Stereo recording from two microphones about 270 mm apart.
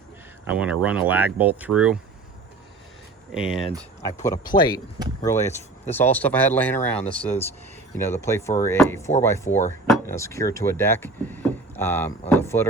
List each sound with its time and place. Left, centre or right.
0.4 s speech: centre
3.3 s speech: centre
4.5 s speech: centre